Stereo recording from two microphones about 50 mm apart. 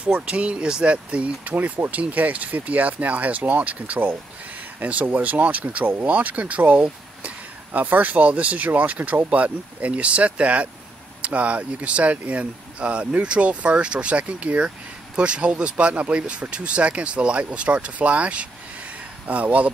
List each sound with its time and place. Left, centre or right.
0.3 s speech: right